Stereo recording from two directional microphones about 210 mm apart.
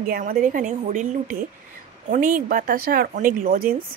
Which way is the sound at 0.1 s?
40° right (ahead or behind).